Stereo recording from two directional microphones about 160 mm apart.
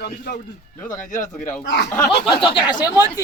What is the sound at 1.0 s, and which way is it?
Speech, 55° left (ahead or behind).